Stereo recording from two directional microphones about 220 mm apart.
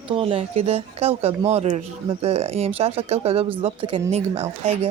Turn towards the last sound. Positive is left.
turn(degrees=-30)  # may be behind; listen again after turning